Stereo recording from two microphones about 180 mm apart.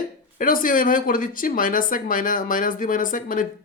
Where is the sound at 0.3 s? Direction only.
50° left (ahead or behind).